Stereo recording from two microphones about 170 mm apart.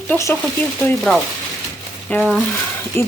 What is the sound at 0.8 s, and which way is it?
Speech, 5° left (ahead or behind).